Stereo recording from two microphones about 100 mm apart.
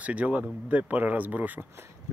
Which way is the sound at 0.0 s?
15° right (ahead or behind).